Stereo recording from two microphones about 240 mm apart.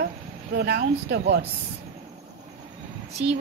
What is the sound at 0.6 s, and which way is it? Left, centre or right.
Speech, right.